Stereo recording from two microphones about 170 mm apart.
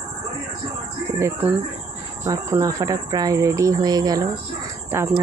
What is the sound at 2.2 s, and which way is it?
Speech, 20° right (ahead or behind).